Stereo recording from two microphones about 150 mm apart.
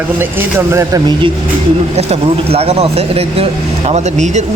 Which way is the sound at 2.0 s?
45° right (ahead or behind).